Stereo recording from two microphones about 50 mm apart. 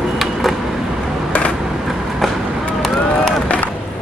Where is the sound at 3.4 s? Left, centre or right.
Left.